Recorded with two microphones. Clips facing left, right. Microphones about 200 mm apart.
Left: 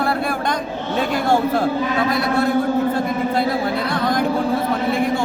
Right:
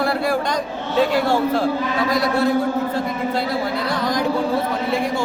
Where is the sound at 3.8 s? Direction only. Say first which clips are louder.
Left 2 dB; 55° left (ahead or behind).